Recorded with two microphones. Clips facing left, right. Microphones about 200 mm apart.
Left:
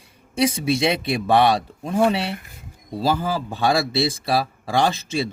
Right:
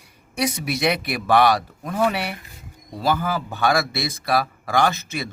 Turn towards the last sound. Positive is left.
turn(degrees=30)  # may be behind; listen again after turning